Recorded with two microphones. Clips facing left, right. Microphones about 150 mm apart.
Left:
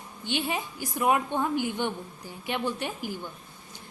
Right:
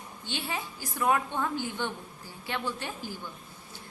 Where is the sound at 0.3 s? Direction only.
15° left (ahead or behind).